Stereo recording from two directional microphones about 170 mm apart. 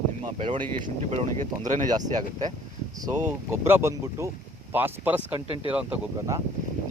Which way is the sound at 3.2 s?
15° right (ahead or behind).